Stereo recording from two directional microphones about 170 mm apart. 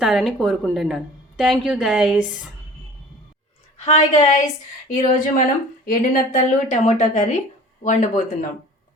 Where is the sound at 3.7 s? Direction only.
40° left (ahead or behind).